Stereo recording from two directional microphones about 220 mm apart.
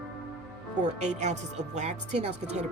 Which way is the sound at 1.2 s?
30° right (ahead or behind).